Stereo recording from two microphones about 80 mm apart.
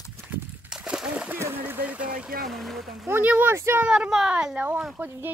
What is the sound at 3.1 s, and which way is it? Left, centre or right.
Speech, right.